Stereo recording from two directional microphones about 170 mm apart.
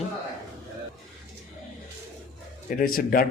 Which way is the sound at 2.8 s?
60° left (ahead or behind).